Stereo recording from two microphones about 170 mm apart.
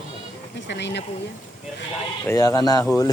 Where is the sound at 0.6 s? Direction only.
90° left.